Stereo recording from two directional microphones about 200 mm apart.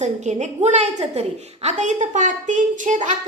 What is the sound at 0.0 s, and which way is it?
A woman's voice, 35° right (ahead or behind).